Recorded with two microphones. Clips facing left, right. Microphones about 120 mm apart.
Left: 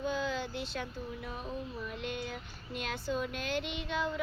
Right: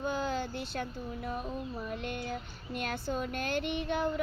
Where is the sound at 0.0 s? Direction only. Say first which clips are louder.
Right 1 dB; 50° right (ahead or behind).